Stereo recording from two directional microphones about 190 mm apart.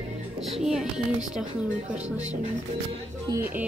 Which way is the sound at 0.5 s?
Centre (ahead or behind).